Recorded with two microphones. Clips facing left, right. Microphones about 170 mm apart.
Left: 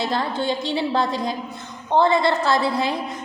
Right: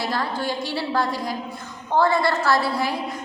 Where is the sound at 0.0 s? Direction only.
25° left (ahead or behind).